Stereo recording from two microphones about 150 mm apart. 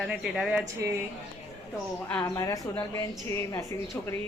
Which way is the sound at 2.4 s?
20° left (ahead or behind).